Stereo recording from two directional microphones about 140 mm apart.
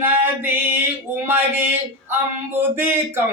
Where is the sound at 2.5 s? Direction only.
15° right (ahead or behind).